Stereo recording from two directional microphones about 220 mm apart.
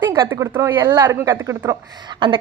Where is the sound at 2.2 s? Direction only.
20° right (ahead or behind).